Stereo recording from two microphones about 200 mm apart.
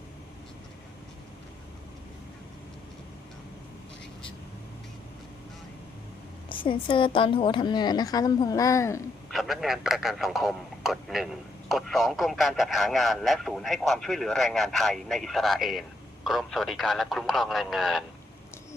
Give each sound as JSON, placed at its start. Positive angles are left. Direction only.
{"t": 6.5, "sound": "a woman's voice", "side_deg": 25}
{"t": 9.3, "sound": "a man's voice", "side_deg": 0}